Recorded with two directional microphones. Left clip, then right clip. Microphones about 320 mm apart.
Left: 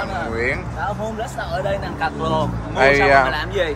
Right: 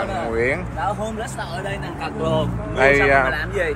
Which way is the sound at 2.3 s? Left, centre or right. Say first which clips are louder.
Left 1 dB; centre.